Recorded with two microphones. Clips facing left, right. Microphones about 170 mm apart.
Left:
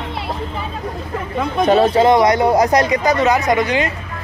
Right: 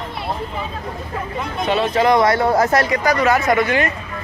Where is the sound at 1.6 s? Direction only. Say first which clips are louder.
Left 6 dB; 45° left (ahead or behind).